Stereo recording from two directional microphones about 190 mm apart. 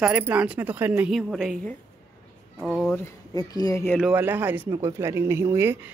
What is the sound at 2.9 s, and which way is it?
Speech, 15° left (ahead or behind).